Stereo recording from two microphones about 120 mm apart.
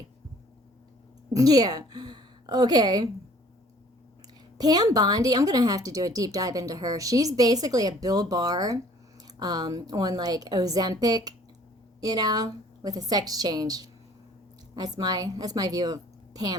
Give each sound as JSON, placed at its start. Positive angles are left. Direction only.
{"t": 1.3, "sound": "a woman's voice", "side_deg": -30}
{"t": 4.5, "sound": "speech", "side_deg": -35}